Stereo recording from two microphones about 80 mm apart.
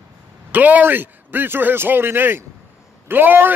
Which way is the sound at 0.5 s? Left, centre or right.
Right.